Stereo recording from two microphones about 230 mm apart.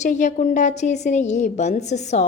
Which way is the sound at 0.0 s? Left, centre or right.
Left.